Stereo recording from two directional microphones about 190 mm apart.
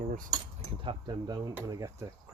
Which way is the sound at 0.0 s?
45° right (ahead or behind).